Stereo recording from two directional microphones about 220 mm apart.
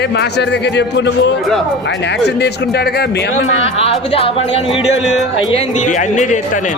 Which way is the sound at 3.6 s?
25° left (ahead or behind).